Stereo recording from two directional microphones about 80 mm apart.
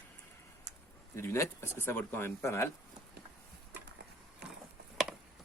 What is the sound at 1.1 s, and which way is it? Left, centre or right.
Speech, left.